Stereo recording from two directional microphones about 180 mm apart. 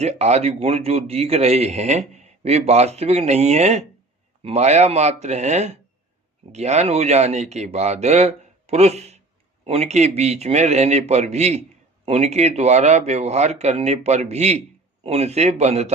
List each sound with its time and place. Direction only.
0.0 s speech: 35° right (ahead or behind)